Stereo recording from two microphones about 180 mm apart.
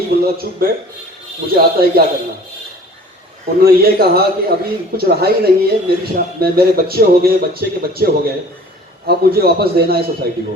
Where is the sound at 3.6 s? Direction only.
60° right (ahead or behind).